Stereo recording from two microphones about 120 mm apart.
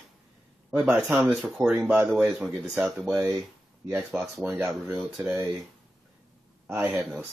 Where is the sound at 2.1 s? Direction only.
5° right (ahead or behind).